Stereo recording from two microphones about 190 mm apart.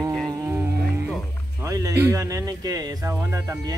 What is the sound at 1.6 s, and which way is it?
Speech, 15° right (ahead or behind).